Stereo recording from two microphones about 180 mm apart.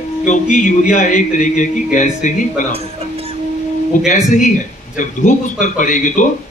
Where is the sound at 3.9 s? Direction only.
45° left (ahead or behind).